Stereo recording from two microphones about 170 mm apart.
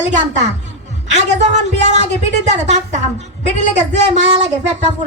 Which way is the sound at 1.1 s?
40° right (ahead or behind).